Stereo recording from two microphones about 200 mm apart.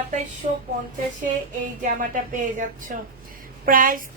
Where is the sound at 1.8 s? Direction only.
40° right (ahead or behind).